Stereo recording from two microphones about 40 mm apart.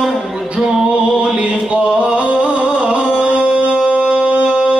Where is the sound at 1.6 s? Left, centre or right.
Right.